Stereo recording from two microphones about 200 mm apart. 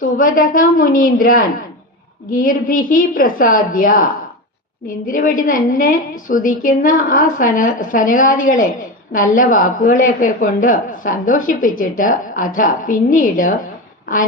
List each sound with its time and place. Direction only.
0.2 s a woman's voice: 45° left (ahead or behind)